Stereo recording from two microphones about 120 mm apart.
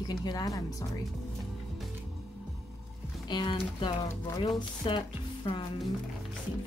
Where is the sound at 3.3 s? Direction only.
40° left (ahead or behind).